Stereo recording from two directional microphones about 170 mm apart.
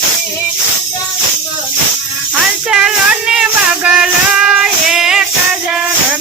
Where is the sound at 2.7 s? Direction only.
5° right (ahead or behind).